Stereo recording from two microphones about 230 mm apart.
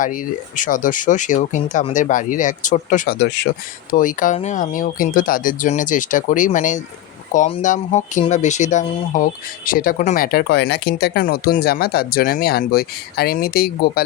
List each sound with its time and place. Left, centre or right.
0.0 s speech: left
3.2 s speech: left
3.9 s speech: left